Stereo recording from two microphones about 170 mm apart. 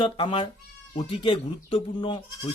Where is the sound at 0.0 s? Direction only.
30° left (ahead or behind).